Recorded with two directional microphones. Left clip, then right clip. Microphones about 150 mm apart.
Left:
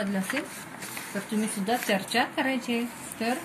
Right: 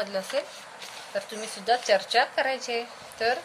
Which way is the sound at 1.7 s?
75° right (ahead or behind).